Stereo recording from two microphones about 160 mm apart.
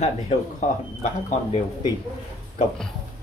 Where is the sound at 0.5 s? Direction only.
50° left (ahead or behind).